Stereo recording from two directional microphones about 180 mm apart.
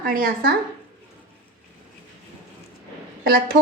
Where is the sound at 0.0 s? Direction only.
55° right (ahead or behind).